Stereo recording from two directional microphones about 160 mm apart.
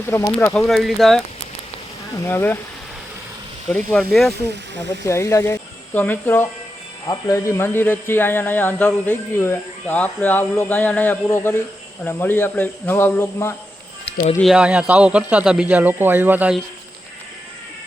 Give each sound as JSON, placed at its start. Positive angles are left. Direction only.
{"t": 0.3, "sound": "speech", "side_deg": 15}
{"t": 2.2, "sound": "speech", "side_deg": 15}
{"t": 3.7, "sound": "speech", "side_deg": 5}
{"t": 4.9, "sound": "speech", "side_deg": 20}
{"t": 7.0, "sound": "speech", "side_deg": 20}
{"t": 14.4, "sound": "a man's voice", "side_deg": -5}